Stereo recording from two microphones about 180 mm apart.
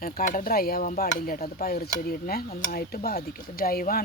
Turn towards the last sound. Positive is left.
turn(degrees=55)  # may be behind; listen again after turning